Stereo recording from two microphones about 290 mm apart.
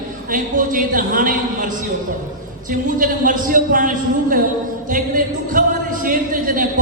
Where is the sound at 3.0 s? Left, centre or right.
Right.